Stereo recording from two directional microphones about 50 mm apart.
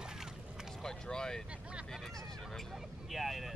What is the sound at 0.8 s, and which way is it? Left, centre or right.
Vehicle, centre.